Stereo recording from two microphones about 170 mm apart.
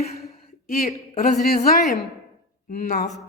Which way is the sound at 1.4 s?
60° left (ahead or behind).